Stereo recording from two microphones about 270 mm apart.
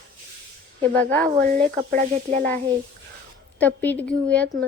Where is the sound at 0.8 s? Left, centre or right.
Centre.